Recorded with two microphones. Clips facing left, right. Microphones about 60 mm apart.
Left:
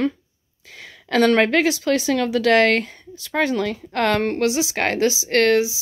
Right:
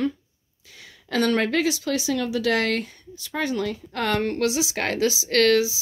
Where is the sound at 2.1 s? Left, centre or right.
Left.